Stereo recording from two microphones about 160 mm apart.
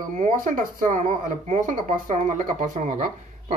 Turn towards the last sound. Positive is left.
turn(degrees=-50)  # may be behind; listen again after turning